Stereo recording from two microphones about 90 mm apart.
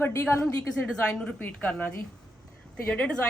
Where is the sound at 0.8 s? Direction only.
10° left (ahead or behind).